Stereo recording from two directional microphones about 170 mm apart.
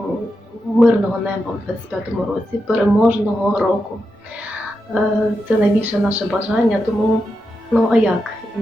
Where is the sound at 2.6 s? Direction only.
10° right (ahead or behind).